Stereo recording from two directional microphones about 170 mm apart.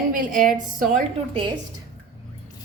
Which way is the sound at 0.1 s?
50° right (ahead or behind).